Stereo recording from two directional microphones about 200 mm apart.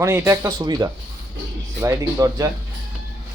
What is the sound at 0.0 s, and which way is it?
A man's voice, 15° right (ahead or behind).